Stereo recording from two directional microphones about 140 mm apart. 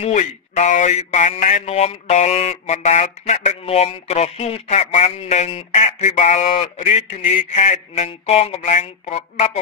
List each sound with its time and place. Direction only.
0.0 s speech: 55° left (ahead or behind)